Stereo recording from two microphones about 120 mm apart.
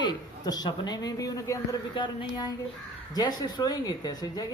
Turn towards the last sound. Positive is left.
turn(degrees=35)  # may be behind; listen again after turning